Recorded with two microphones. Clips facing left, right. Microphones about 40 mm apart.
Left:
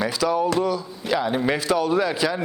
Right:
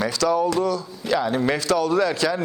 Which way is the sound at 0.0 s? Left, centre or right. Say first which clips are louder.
Right 1 dB; centre.